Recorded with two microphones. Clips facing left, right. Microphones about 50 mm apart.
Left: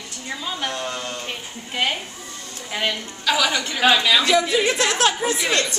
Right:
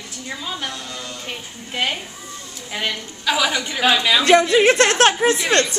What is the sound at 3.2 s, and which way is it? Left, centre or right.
A woman's voice, centre.